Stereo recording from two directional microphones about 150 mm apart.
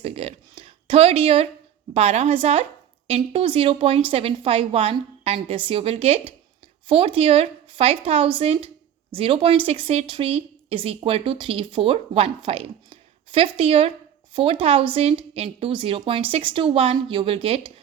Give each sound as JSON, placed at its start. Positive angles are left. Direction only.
{"t": 0.0, "sound": "a woman's voice", "side_deg": -40}